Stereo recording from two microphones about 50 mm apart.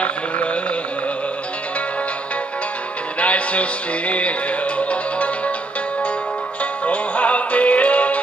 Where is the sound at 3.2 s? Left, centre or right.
Left.